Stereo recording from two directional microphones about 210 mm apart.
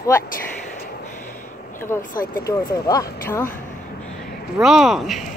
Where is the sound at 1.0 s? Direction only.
35° left (ahead or behind).